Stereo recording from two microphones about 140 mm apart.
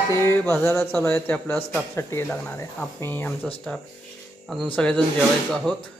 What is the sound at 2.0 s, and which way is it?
Speech, 20° left (ahead or behind).